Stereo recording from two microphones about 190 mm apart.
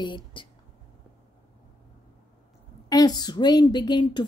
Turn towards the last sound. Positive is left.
turn(degrees=25)  # may be behind; listen again after turning